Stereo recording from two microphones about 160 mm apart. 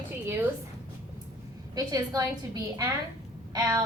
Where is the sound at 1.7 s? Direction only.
20° right (ahead or behind).